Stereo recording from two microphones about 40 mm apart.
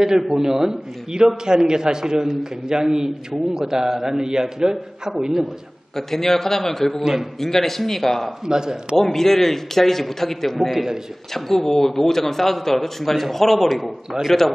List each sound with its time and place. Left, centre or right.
0.0 s a man's voice: centre
5.9 s a man's voice: centre
8.5 s a man's voice: centre
8.9 s a man's voice: centre
10.7 s a man's voice: centre
11.3 s a man's voice: centre